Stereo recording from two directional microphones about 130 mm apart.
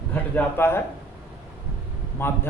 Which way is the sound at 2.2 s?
15° left (ahead or behind).